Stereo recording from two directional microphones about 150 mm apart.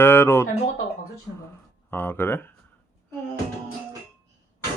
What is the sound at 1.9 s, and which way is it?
Speech, 15° left (ahead or behind).